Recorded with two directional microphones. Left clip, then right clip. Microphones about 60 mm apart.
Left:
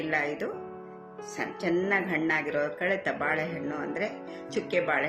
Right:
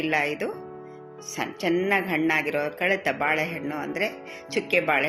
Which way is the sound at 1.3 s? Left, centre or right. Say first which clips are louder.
Right 4 dB; right.